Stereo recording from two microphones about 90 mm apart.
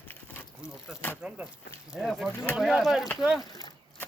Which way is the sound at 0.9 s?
5° right (ahead or behind).